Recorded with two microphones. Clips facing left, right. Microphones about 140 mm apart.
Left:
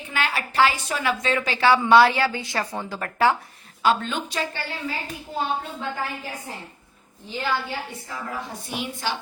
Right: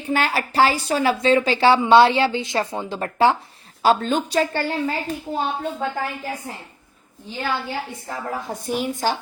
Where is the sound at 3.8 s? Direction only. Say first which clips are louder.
Right 4 dB; 35° right (ahead or behind).